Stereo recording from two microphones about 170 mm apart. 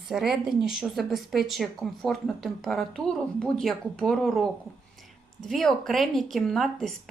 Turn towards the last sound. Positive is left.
turn(degrees=0)  # may be behind; listen again after turning